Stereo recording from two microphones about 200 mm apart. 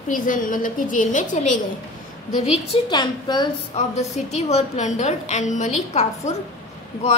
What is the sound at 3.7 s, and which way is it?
A woman's voice, 35° left (ahead or behind).